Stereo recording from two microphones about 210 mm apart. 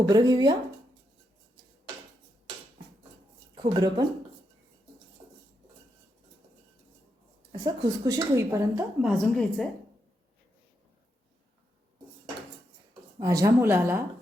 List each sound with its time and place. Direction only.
0.1 s speech: 20° right (ahead or behind)
3.5 s speech: 20° right (ahead or behind)
7.5 s a woman's voice: 15° right (ahead or behind)
9.0 s a woman's voice: centre (ahead or behind)
13.1 s a woman's voice: 15° right (ahead or behind)